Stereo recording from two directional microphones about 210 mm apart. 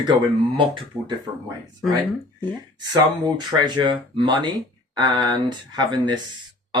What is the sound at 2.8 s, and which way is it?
Speech, 20° right (ahead or behind).